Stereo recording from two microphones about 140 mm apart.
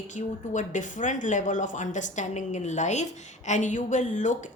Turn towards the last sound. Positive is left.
turn(degrees=60)  # may be behind; listen again after turning